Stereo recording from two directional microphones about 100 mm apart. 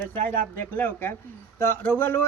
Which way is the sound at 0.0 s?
20° left (ahead or behind).